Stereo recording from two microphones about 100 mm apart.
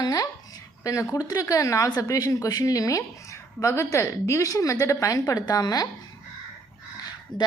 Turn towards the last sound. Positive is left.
turn(degrees=0)  # may be behind; listen again after turning